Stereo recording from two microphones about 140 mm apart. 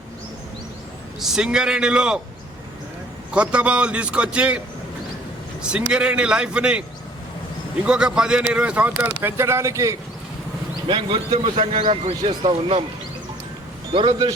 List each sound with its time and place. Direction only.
1.2 s a man's voice: 5° right (ahead or behind)
3.3 s a man's voice: 10° right (ahead or behind)
5.9 s a man's voice: 5° right (ahead or behind)
7.9 s a man's voice: 5° right (ahead or behind); by 10.0 s 20° right (ahead or behind)
10.8 s a man's voice: 35° right (ahead or behind)
13.9 s a man's voice: 40° right (ahead or behind)